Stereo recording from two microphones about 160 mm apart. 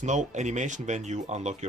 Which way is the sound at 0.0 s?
50° right (ahead or behind).